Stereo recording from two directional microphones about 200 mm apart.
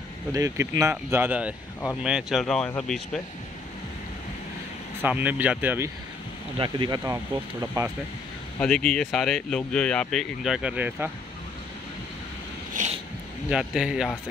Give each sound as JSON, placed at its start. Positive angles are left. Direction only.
{"t": 0.3, "sound": "speech", "side_deg": -15}
{"t": 5.0, "sound": "speech", "side_deg": -5}
{"t": 6.6, "sound": "speech", "side_deg": -20}
{"t": 8.5, "sound": "speech", "side_deg": 5}
{"t": 12.8, "sound": "a sound", "side_deg": -40}
{"t": 13.5, "sound": "speech", "side_deg": -5}